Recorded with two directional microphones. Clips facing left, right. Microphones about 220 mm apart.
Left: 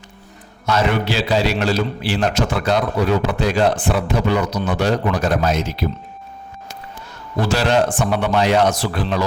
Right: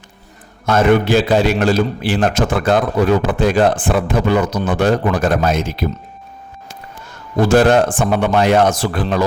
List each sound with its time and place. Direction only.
0.6 s a man's voice: 50° right (ahead or behind)
7.4 s a man's voice: 50° right (ahead or behind)